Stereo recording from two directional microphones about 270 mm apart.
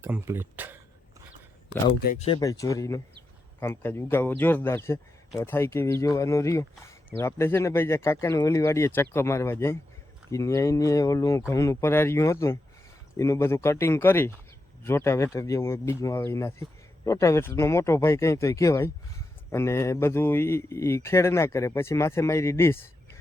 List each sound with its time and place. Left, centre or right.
0.0 s speech: centre
2.0 s speech: left